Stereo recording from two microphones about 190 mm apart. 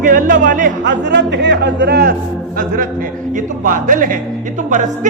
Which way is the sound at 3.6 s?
45° right (ahead or behind).